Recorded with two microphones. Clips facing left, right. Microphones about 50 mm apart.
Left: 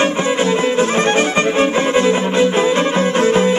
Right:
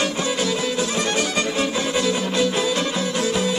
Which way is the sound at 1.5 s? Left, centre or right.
Left.